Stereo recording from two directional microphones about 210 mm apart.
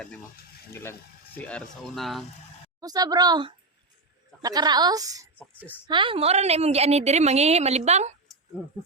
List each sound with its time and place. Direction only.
0.7 s speech: 10° left (ahead or behind)
2.8 s a woman's voice: 20° right (ahead or behind)